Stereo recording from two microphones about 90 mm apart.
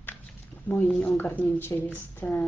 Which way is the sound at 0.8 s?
15° left (ahead or behind).